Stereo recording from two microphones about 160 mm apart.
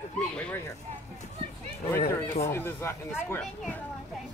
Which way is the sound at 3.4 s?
5° left (ahead or behind).